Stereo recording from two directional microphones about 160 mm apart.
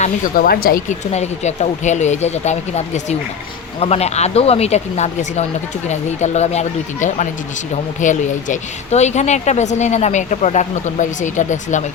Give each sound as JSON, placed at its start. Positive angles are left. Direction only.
{"t": 0.3, "sound": "speech", "side_deg": 70}
{"t": 1.1, "sound": "speech", "side_deg": 45}